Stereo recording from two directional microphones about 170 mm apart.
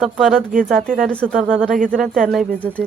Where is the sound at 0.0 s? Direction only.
Centre (ahead or behind).